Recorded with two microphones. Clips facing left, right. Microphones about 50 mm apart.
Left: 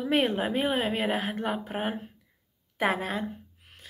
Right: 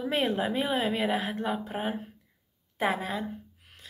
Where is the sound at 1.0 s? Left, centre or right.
Left.